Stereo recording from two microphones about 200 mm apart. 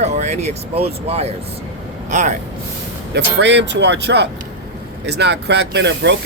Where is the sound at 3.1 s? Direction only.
60° right (ahead or behind).